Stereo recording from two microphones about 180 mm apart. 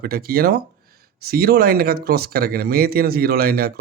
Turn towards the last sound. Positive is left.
turn(degrees=-55)  # may be behind; listen again after turning